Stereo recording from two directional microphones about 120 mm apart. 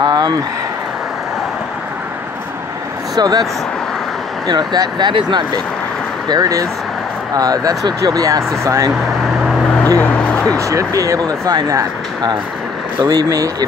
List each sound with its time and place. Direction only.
0.0 s speech: 35° right (ahead or behind)
3.2 s speech: 30° right (ahead or behind)
4.5 s speech: 40° right (ahead or behind)
9.9 s speech: 10° left (ahead or behind)
10.6 s speech: 25° right (ahead or behind)